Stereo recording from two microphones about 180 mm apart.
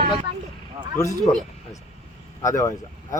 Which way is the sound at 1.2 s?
Centre (ahead or behind).